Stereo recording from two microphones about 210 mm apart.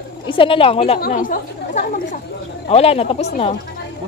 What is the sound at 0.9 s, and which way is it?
Speech, 45° left (ahead or behind).